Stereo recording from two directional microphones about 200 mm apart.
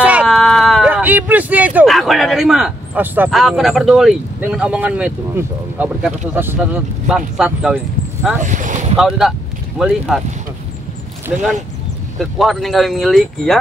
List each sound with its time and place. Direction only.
0.0 s speech: 5° right (ahead or behind)
8.4 s a sound: 40° right (ahead or behind)
8.9 s speech: 5° right (ahead or behind)
11.3 s speech: 5° right (ahead or behind)